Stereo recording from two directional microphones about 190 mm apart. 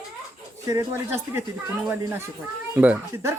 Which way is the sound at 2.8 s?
10° right (ahead or behind).